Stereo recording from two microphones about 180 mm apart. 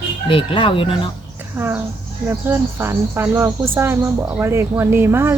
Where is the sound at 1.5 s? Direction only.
10° right (ahead or behind).